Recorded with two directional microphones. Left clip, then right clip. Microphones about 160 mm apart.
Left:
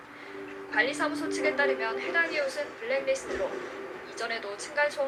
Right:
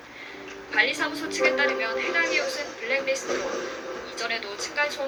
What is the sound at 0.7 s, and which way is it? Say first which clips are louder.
A woman's voice: right 4 dB; 15° right (ahead or behind).